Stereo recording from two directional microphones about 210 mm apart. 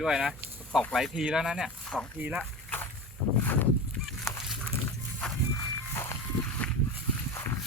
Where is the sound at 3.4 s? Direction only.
10° left (ahead or behind).